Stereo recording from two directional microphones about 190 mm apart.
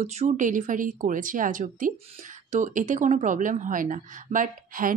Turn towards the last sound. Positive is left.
turn(degrees=-45)  # may be behind; listen again after turning